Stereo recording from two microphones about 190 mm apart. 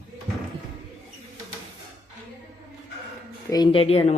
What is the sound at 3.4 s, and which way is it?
Speech, 20° left (ahead or behind).